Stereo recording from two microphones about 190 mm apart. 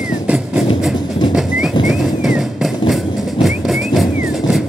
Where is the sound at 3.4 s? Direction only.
Centre (ahead or behind).